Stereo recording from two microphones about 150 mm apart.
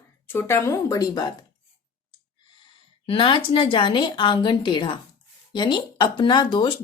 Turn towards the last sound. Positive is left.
turn(degrees=30)  # may be behind; listen again after turning